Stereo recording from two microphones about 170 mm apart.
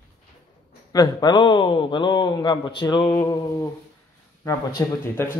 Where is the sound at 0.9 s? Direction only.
25° left (ahead or behind).